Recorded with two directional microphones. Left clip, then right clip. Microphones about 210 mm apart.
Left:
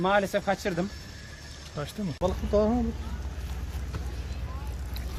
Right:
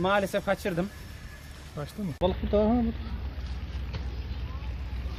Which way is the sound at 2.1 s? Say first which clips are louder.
Even; 30° right (ahead or behind).